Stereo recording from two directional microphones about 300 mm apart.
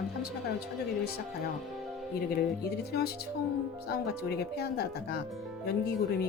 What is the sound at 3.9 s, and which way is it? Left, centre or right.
Speech, left.